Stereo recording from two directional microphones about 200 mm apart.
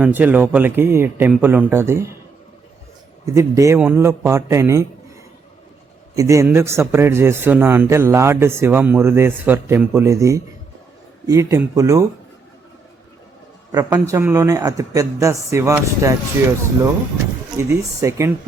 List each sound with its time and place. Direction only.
0.0 s a man's voice: 10° right (ahead or behind)
3.2 s a man's voice: 15° right (ahead or behind)
6.1 s a man's voice: 15° right (ahead or behind)
13.9 s a man's voice: 10° right (ahead or behind)
17.6 s a man's voice: 15° right (ahead or behind)